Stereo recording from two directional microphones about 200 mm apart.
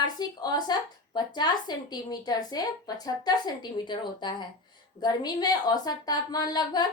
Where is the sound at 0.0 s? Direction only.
20° left (ahead or behind).